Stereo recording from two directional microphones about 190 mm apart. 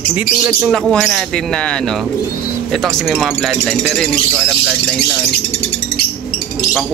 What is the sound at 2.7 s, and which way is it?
Speech, centre (ahead or behind).